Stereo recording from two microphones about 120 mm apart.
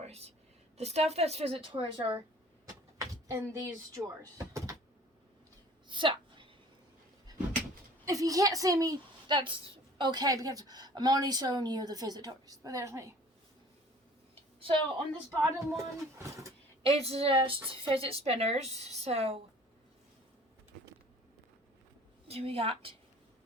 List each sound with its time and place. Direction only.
0.0 s a sound: 60° right (ahead or behind)
0.8 s speech: 65° right (ahead or behind)
2.6 s speech: 30° right (ahead or behind)
5.9 s a sound: 45° right (ahead or behind)
8.0 s a woman's voice: 30° right (ahead or behind)
15.3 s speech: 30° right (ahead or behind)
16.8 s speech: 55° right (ahead or behind)
22.3 s speech: 55° right (ahead or behind)